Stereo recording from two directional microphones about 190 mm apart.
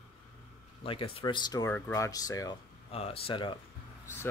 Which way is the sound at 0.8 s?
30° left (ahead or behind).